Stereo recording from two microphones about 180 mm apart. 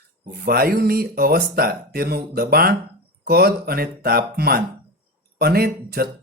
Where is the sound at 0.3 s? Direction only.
55° right (ahead or behind).